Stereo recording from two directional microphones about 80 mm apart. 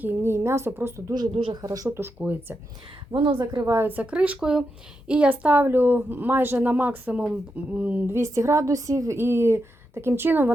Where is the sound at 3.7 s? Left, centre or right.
Right.